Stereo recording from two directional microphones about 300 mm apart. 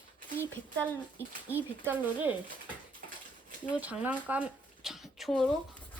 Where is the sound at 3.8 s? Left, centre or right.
Centre.